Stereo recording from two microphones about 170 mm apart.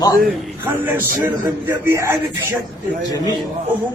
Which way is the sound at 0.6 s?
10° right (ahead or behind).